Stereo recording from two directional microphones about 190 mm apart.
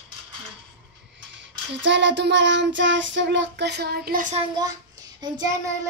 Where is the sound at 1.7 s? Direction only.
70° right (ahead or behind); by 4.4 s 45° right (ahead or behind).